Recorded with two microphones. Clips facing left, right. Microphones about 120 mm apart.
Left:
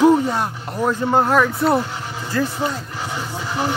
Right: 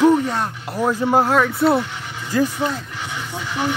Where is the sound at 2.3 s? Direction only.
15° right (ahead or behind).